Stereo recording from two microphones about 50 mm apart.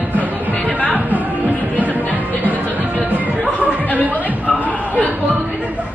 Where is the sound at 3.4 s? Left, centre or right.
Left.